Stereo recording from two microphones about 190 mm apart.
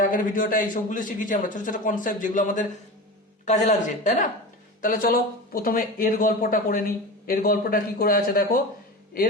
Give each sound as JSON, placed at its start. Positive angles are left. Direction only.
{"t": 0.0, "sound": "speech", "side_deg": 45}